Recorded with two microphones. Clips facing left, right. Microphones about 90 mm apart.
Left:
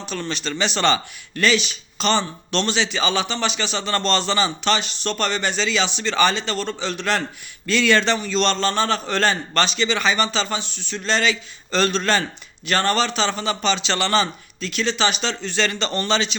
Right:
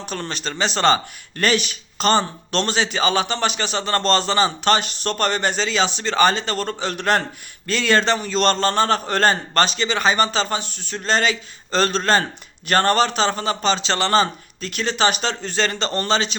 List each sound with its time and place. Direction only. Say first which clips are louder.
0.0 s a man's voice: even; 50° right (ahead or behind)
1.4 s a man's voice: even; 50° right (ahead or behind)